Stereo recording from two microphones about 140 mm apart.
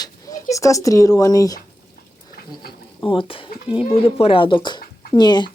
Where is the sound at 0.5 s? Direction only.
25° left (ahead or behind).